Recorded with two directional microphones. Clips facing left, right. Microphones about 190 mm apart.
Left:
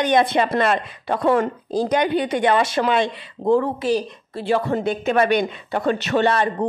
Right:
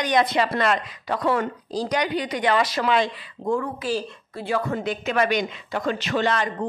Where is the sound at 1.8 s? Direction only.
25° left (ahead or behind).